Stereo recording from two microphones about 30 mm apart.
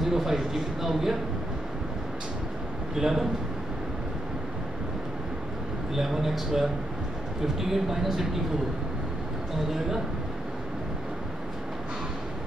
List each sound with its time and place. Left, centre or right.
0.0 s speech: centre
3.0 s speech: centre
5.9 s speech: centre
7.7 s speech: centre